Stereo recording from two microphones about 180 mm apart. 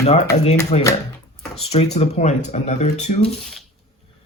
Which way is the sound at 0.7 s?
35° left (ahead or behind).